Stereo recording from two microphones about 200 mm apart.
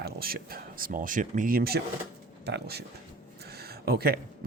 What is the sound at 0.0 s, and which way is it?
Speech, 50° right (ahead or behind).